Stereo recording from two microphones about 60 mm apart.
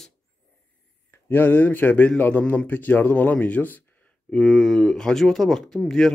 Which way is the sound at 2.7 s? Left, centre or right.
Left.